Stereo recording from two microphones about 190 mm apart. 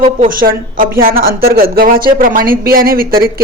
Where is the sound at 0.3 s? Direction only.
50° right (ahead or behind).